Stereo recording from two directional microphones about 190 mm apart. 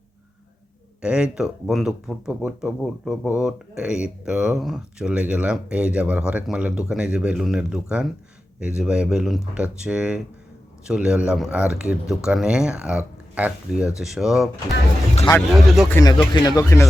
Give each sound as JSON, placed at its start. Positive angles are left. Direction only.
{"t": 1.0, "sound": "speech", "side_deg": -5}
{"t": 15.2, "sound": "speech", "side_deg": 15}
{"t": 15.6, "sound": "speech", "side_deg": 0}
{"t": 15.9, "sound": "speech", "side_deg": 15}